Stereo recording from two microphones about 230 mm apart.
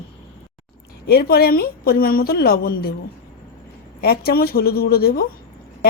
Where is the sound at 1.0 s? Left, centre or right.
Left.